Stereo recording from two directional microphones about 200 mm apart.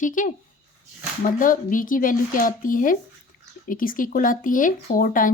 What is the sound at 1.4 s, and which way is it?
Speech, 40° left (ahead or behind).